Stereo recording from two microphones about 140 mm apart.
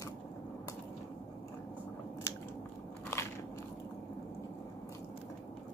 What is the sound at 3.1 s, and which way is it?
Biting, 20° left (ahead or behind).